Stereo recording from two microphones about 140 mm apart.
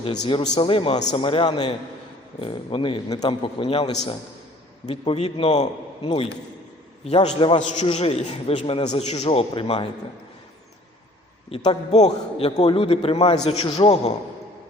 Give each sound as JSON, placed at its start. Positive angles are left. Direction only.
{"t": 0.1, "sound": "a man's voice", "side_deg": 35}
{"t": 11.4, "sound": "a man's voice", "side_deg": 45}